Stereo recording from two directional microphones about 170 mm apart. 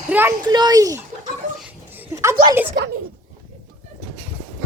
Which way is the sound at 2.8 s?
65° right (ahead or behind).